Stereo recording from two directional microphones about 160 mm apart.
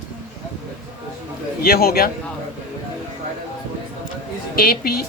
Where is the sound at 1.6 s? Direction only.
70° left (ahead or behind).